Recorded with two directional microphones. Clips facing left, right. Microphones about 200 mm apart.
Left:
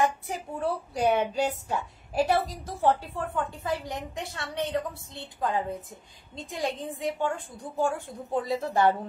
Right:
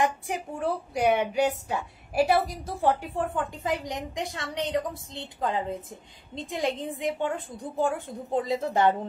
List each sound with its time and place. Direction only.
0.0 s a woman's voice: 15° right (ahead or behind)